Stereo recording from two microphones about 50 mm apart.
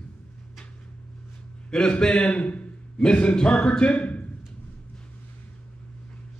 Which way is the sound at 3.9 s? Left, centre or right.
Left.